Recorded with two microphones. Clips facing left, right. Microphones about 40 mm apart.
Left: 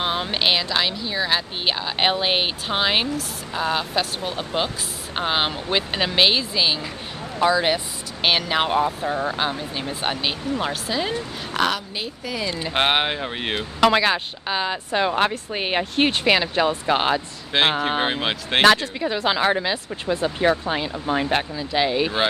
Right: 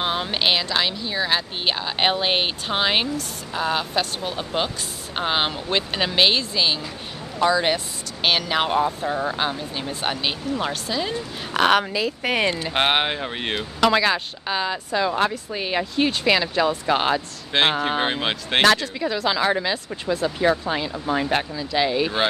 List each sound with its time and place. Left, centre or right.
0.0 s speech: centre
11.7 s speech: right
12.6 s speech: centre
13.6 s speech: centre
14.9 s speech: left
16.3 s speech: centre
18.6 s speech: centre